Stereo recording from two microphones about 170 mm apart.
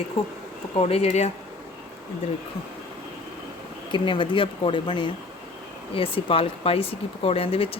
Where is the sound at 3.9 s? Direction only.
30° left (ahead or behind).